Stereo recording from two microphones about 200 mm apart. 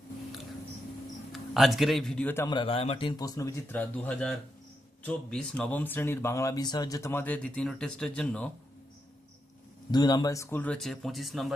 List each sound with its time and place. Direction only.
1.3 s a man's voice: centre (ahead or behind)
2.5 s speech: 25° left (ahead or behind); by 8.4 s 5° left (ahead or behind)
9.9 s speech: 20° left (ahead or behind); by 11.5 s centre (ahead or behind)